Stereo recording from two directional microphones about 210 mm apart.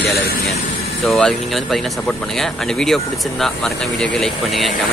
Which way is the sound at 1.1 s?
Centre (ahead or behind).